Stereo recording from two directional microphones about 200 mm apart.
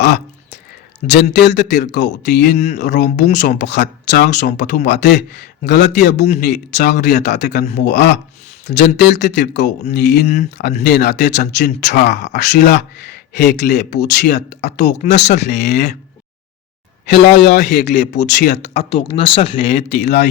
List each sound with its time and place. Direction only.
0.0 s a sound: 55° left (ahead or behind)
1.0 s speech: 60° left (ahead or behind)
3.2 s speech: 30° left (ahead or behind)
3.6 s speech: 60° left (ahead or behind)
17.1 s speech: 55° left (ahead or behind)
18.1 s speech: 35° left (ahead or behind)
19.9 s speech: 55° left (ahead or behind)